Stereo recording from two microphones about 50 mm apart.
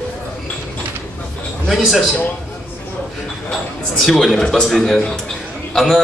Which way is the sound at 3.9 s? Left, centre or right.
Centre.